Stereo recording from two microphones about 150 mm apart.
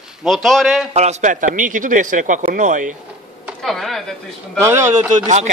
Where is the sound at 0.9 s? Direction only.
45° right (ahead or behind).